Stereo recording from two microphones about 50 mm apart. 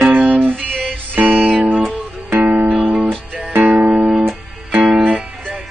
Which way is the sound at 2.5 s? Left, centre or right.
Right.